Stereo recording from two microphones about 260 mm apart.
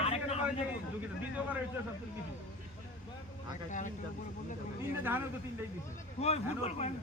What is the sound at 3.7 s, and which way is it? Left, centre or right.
Speech, left.